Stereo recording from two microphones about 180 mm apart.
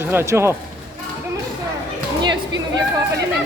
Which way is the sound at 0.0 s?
15° right (ahead or behind).